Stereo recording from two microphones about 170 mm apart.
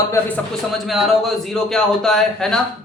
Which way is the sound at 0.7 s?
Centre (ahead or behind).